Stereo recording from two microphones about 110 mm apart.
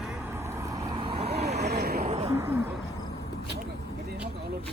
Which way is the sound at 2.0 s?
65° right (ahead or behind).